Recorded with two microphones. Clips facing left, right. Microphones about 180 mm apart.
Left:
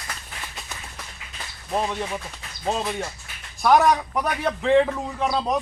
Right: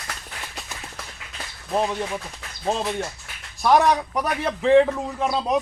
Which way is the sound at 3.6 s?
Centre (ahead or behind).